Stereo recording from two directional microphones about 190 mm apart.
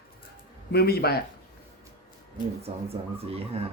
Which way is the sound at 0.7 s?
55° left (ahead or behind).